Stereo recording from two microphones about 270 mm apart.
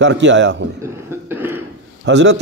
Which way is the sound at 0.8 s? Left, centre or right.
Centre.